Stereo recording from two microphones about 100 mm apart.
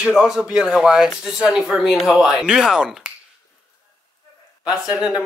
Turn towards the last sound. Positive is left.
turn(degrees=-10)  # may be behind; listen again after turning